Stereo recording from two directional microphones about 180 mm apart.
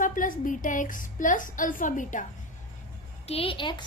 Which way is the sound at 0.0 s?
50° left (ahead or behind).